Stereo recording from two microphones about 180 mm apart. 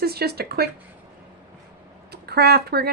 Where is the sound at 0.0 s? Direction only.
60° right (ahead or behind).